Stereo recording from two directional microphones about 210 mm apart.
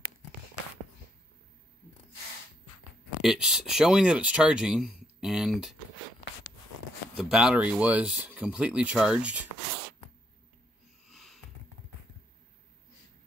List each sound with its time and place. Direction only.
3.2 s speech: 5° right (ahead or behind)
7.2 s speech: 5° right (ahead or behind)
11.1 s a sound: centre (ahead or behind)